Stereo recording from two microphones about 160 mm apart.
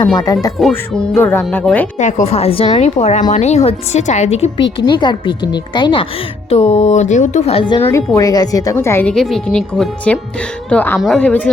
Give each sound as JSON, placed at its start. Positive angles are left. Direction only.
{"t": 0.3, "sound": "a woman's voice", "side_deg": 20}
{"t": 2.0, "sound": "a woman's voice", "side_deg": 50}
{"t": 6.5, "sound": "speech", "side_deg": 40}
{"t": 7.8, "sound": "a woman's voice", "side_deg": 15}
{"t": 9.1, "sound": "speech", "side_deg": 0}